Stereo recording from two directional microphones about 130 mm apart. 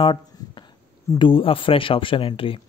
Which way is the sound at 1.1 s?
40° left (ahead or behind).